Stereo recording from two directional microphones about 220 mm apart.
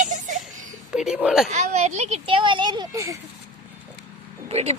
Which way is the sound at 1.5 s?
30° right (ahead or behind).